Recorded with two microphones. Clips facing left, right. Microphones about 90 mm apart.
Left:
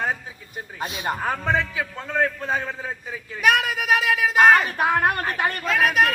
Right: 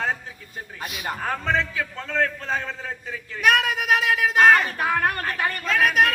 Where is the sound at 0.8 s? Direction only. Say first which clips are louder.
Left 4 dB; 25° left (ahead or behind).